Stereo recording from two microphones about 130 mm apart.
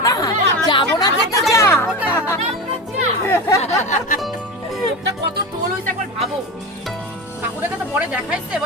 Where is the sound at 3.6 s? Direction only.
80° left.